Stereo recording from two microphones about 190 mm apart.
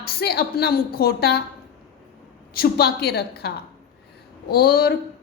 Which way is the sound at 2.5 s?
55° left (ahead or behind).